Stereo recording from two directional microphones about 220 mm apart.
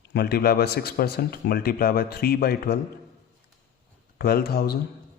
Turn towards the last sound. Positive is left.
turn(degrees=45)  # may be behind; listen again after turning